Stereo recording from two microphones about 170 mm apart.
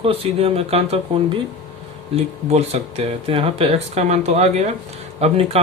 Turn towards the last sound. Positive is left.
turn(degrees=-35)  # may be behind; listen again after turning